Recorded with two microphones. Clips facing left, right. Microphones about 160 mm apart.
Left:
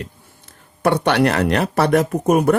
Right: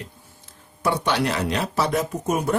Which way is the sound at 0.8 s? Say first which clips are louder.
Left 6 dB; 65° left (ahead or behind).